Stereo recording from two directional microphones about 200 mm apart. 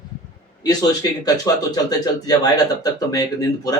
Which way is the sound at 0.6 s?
20° left (ahead or behind).